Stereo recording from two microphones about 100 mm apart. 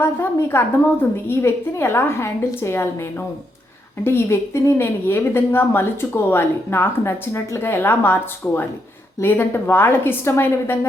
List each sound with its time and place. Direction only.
0.0 s a woman's voice: 25° left (ahead or behind)